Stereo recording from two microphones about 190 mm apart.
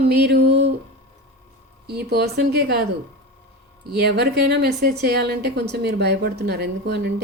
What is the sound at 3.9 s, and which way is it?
A woman's voice, 60° right (ahead or behind).